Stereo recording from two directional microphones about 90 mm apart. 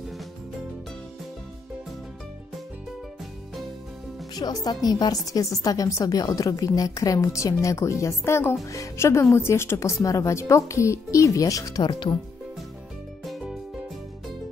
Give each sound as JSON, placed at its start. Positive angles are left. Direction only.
{"t": 4.4, "sound": "a woman's voice", "side_deg": 50}
{"t": 11.8, "sound": "speech", "side_deg": 60}